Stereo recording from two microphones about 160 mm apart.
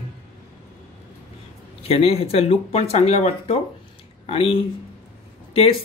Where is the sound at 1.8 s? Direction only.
40° left (ahead or behind).